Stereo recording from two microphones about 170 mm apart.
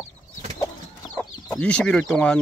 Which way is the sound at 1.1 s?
5° left (ahead or behind).